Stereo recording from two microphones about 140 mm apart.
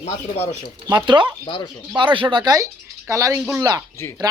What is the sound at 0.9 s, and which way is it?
Speech, 30° right (ahead or behind).